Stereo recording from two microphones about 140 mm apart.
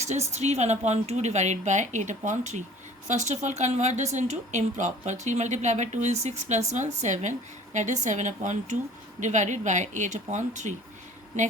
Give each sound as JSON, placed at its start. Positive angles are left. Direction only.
{"t": 0.0, "sound": "a woman's voice", "side_deg": -55}